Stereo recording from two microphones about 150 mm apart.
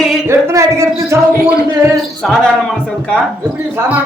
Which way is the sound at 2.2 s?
5° left (ahead or behind).